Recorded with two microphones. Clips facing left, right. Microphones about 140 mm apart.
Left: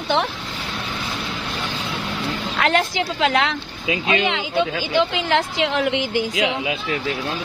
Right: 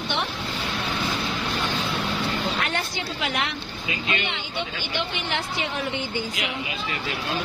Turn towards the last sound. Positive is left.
turn(degrees=90)